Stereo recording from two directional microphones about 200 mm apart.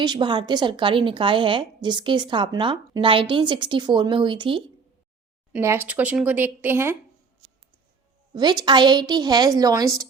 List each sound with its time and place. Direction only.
0.0 s a woman's voice: 20° right (ahead or behind)
5.5 s speech: 15° right (ahead or behind)
8.3 s a woman's voice: 20° right (ahead or behind)